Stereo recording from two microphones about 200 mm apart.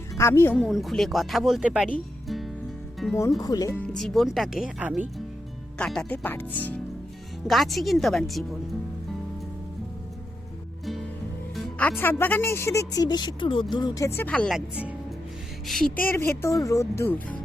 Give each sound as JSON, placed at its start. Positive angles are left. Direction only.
{"t": 0.1, "sound": "a woman's voice", "side_deg": 15}
{"t": 0.5, "sound": "speech", "side_deg": 0}
{"t": 1.9, "sound": "music", "side_deg": 0}
{"t": 3.0, "sound": "speech", "side_deg": -5}
{"t": 3.4, "sound": "speech", "side_deg": 15}
{"t": 3.9, "sound": "speech", "side_deg": 0}
{"t": 11.5, "sound": "speech", "side_deg": 10}
{"t": 14.2, "sound": "speech", "side_deg": 5}